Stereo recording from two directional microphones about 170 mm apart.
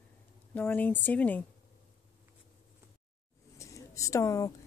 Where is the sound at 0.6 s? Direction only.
10° left (ahead or behind).